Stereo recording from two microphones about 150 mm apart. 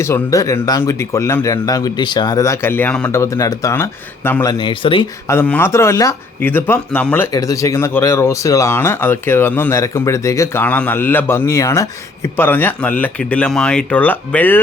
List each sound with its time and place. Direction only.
0.0 s speech: 20° left (ahead or behind)
4.5 s speech: 35° left (ahead or behind)
5.3 s speech: 15° left (ahead or behind)